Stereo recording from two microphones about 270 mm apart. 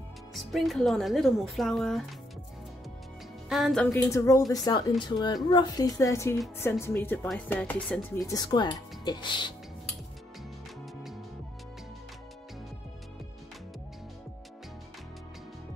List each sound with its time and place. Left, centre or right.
0.3 s speech: centre
3.4 s speech: centre
8.3 s speech: centre